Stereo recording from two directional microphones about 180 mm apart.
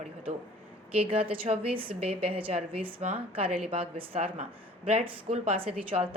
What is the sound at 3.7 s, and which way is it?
A woman's voice, 30° right (ahead or behind).